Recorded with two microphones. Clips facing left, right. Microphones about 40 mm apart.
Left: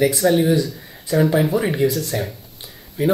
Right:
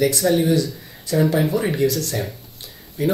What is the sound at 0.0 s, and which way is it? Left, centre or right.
Speech, centre.